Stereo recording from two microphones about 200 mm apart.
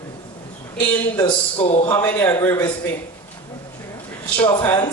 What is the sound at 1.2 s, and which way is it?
Speech, 25° left (ahead or behind).